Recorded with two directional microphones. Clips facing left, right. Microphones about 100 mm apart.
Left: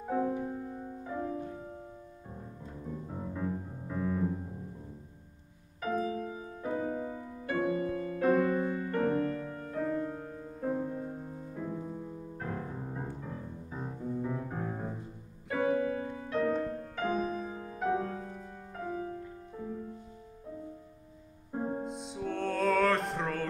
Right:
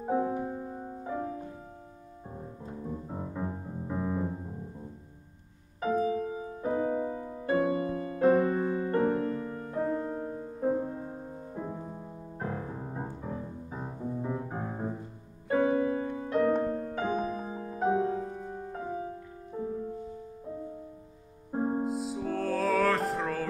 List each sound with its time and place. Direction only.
0.0 s music: 25° right (ahead or behind)
0.3 s music: 35° right (ahead or behind)
3.1 s music: 25° right (ahead or behind)
5.8 s music: 30° right (ahead or behind)
9.7 s music: 25° right (ahead or behind)
15.4 s music: 30° right (ahead or behind)
21.5 s music: 30° right (ahead or behind)
21.8 s music: 5° right (ahead or behind)